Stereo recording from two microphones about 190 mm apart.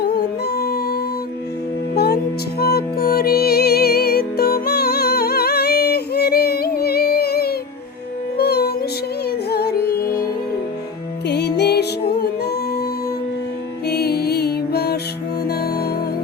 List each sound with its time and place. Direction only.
0.0 s music: 55° left (ahead or behind)
2.6 s music: 55° left (ahead or behind)
11.3 s music: 60° left (ahead or behind)
13.8 s music: 55° left (ahead or behind)